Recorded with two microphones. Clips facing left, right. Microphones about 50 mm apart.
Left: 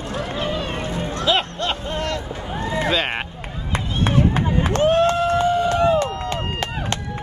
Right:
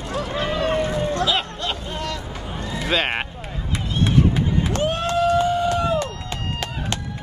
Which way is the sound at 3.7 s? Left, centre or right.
Left.